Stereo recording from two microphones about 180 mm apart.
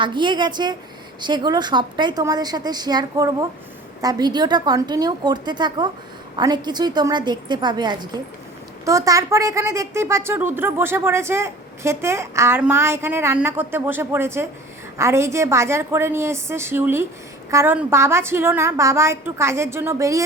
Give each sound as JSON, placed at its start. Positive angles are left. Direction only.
{"t": 0.0, "sound": "a woman's voice", "side_deg": -25}